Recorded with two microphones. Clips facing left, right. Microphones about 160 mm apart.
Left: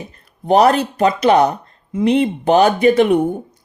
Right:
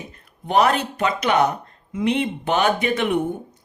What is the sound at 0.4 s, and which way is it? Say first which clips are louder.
Speech: left 6 dB; 35° left (ahead or behind).